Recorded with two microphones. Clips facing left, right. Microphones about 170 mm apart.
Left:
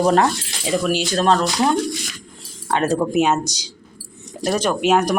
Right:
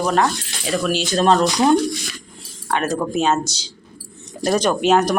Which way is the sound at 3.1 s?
15° left (ahead or behind).